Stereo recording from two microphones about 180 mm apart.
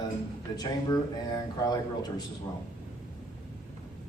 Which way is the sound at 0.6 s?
20° left (ahead or behind).